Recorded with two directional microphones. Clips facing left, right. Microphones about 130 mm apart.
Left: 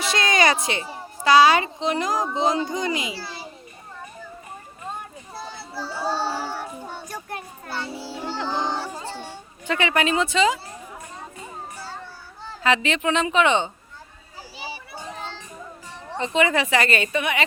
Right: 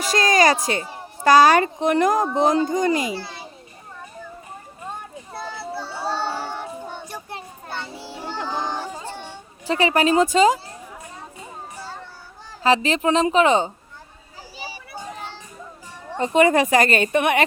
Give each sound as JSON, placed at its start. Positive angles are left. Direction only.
{"t": 0.0, "sound": "a woman's voice", "side_deg": -40}
{"t": 5.3, "sound": "children playing", "side_deg": -60}
{"t": 6.1, "sound": "child singing", "side_deg": 30}
{"t": 7.1, "sound": "children playing", "side_deg": -25}
{"t": 7.8, "sound": "children playing", "side_deg": 10}
{"t": 8.0, "sound": "child singing", "side_deg": -15}
{"t": 9.0, "sound": "a sound", "side_deg": -15}
{"t": 9.6, "sound": "a woman's voice", "side_deg": -35}
{"t": 12.6, "sound": "a woman's voice", "side_deg": -35}
{"t": 16.1, "sound": "a woman's voice", "side_deg": -45}